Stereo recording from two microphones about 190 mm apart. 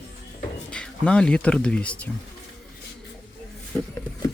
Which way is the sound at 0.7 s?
5° left (ahead or behind).